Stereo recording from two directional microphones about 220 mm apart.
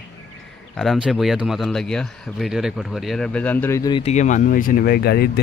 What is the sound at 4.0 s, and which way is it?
Speech, 30° left (ahead or behind).